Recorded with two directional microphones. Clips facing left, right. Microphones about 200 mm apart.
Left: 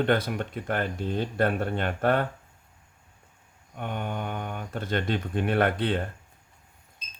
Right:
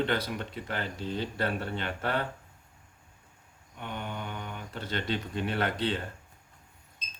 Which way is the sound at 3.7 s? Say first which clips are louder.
Left 5 dB; 50° left (ahead or behind).